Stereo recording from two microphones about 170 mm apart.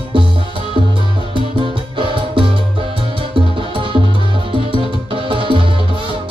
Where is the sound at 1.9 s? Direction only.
30° right (ahead or behind).